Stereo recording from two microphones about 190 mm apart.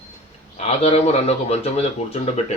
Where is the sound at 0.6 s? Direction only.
35° left (ahead or behind).